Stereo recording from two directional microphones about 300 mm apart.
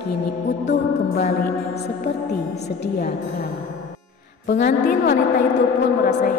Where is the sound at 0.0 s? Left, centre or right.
Left.